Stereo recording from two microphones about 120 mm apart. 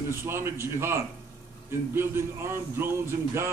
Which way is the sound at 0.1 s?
20° right (ahead or behind).